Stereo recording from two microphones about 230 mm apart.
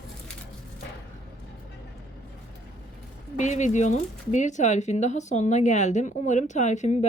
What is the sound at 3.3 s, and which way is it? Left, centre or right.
Speech, left.